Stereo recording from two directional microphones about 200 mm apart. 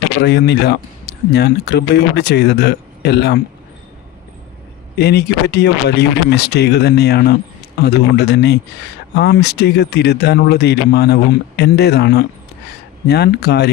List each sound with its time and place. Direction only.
0.2 s speech: 55° left (ahead or behind)
4.9 s speech: 55° left (ahead or behind)